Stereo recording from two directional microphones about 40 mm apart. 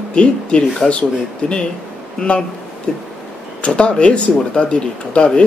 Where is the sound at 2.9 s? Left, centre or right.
Left.